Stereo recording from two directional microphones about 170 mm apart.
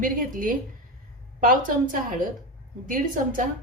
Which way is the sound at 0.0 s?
50° right (ahead or behind).